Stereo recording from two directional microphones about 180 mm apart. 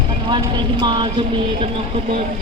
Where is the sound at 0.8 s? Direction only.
25° right (ahead or behind).